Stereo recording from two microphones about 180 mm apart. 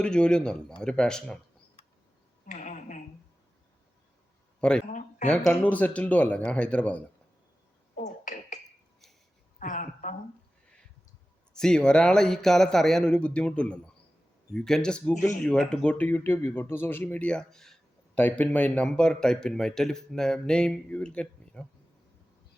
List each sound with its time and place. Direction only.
0.0 s a man's voice: 5° left (ahead or behind)
2.5 s a sound: 45° left (ahead or behind)
4.9 s speech: 45° left (ahead or behind)
5.5 s speech: 10° left (ahead or behind)
7.9 s a sound: 40° left (ahead or behind)
11.5 s a man's voice: 5° left (ahead or behind)